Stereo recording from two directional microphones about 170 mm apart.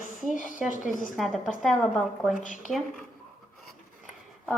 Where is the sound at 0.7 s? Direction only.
50° left (ahead or behind).